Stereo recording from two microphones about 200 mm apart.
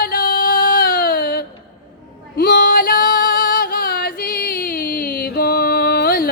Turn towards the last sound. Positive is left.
turn(degrees=50)  # may be behind; listen again after turning